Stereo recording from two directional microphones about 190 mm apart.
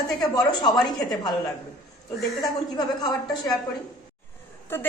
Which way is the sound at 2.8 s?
20° left (ahead or behind).